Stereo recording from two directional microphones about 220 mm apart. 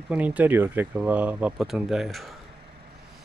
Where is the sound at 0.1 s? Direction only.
5° right (ahead or behind).